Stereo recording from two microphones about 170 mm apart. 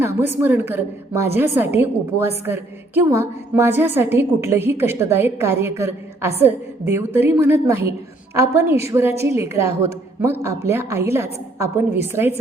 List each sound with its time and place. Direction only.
0.0 s a woman's voice: 15° right (ahead or behind)